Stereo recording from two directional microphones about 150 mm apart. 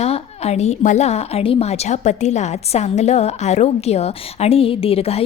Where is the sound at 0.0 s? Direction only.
45° left (ahead or behind).